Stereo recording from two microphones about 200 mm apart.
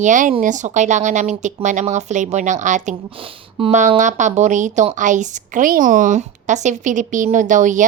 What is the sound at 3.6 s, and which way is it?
Speech, 25° right (ahead or behind).